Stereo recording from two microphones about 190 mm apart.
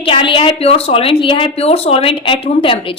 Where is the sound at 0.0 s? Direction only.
30° left (ahead or behind).